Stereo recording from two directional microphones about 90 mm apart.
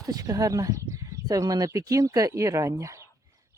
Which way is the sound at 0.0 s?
40° right (ahead or behind).